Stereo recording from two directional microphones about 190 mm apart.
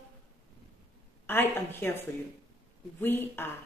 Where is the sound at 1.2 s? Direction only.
10° left (ahead or behind).